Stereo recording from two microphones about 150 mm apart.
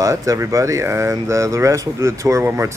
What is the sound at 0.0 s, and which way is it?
A man's voice, 20° right (ahead or behind).